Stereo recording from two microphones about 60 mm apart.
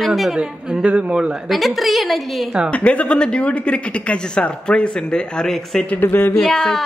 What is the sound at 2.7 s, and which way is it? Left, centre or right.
A man's voice, left.